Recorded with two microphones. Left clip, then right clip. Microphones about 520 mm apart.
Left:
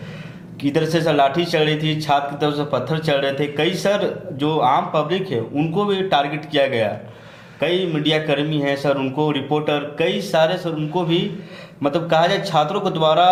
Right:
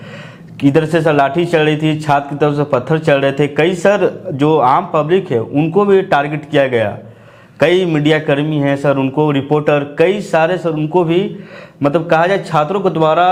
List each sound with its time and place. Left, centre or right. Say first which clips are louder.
0.6 s a man's voice: right 7 dB; right
7.6 s a man's voice: right 8 dB; right